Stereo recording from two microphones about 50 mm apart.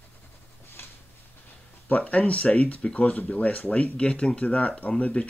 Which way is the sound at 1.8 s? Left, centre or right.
Left.